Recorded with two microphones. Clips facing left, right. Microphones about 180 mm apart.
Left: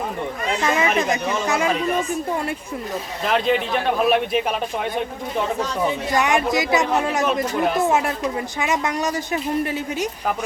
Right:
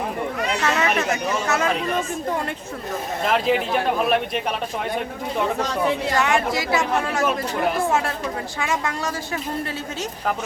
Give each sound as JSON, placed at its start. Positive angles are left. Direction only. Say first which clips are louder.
{"t": 0.6, "sound": "speech", "louder": "left 3 dB", "side_deg": 15}
{"t": 3.2, "sound": "a man's voice", "louder": "left 1 dB", "side_deg": 0}
{"t": 5.5, "sound": "speech", "louder": "even", "side_deg": -65}
{"t": 6.1, "sound": "a woman's voice", "louder": "left 2 dB", "side_deg": 15}